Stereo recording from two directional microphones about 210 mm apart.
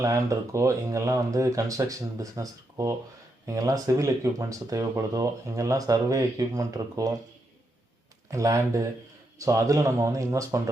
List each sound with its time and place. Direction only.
0.0 s speech: 15° right (ahead or behind)
8.3 s speech: 15° right (ahead or behind)